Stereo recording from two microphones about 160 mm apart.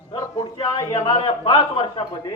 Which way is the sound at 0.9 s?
40° left (ahead or behind).